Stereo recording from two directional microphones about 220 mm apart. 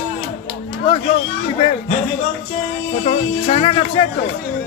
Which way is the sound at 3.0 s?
30° left (ahead or behind).